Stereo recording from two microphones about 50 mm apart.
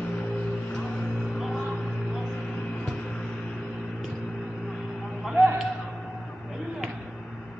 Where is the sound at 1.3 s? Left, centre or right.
Centre.